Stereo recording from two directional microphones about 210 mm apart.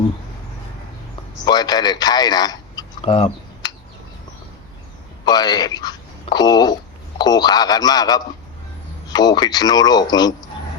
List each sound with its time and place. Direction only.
1.5 s speech: 20° left (ahead or behind)
5.2 s speech: 20° left (ahead or behind)